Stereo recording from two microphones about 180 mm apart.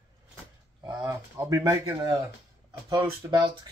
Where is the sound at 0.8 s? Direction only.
20° right (ahead or behind).